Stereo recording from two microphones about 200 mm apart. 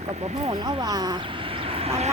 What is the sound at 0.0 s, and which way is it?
Speech, 30° right (ahead or behind).